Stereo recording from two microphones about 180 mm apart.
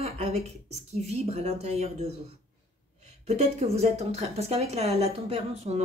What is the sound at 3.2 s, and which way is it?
Speech, 35° right (ahead or behind).